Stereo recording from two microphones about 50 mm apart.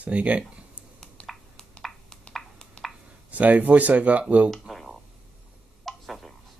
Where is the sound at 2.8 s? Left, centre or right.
Centre.